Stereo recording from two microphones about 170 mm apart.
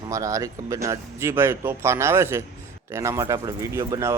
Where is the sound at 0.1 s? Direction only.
20° right (ahead or behind).